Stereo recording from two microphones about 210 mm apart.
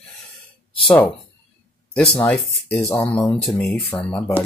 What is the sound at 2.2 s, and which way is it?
Speech, 10° left (ahead or behind).